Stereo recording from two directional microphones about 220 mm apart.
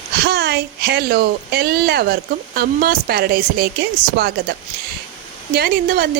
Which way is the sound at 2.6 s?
45° right (ahead or behind).